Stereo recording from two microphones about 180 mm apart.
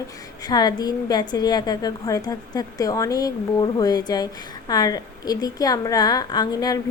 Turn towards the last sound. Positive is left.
turn(degrees=20)  # may be behind; listen again after turning